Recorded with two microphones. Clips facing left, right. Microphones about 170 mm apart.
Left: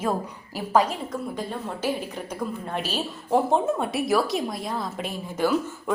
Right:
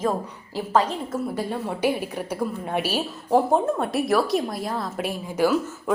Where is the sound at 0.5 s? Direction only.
10° left (ahead or behind).